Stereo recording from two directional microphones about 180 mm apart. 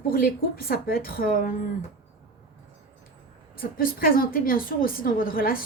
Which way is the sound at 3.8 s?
55° left (ahead or behind).